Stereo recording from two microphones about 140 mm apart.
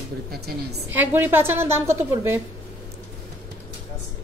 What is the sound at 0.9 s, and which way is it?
A woman's voice, 15° right (ahead or behind).